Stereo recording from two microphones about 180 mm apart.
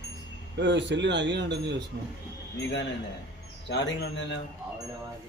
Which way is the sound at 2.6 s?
80° left.